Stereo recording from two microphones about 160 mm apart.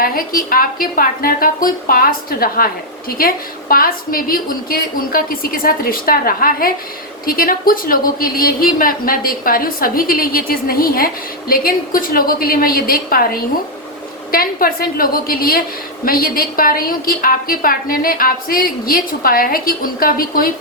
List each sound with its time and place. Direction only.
0.0 s a woman's voice: 65° left (ahead or behind)